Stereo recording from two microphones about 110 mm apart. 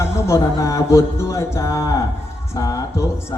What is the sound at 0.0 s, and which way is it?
Speech, 25° left (ahead or behind).